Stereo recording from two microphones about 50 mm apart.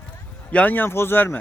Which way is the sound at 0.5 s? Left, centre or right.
Left.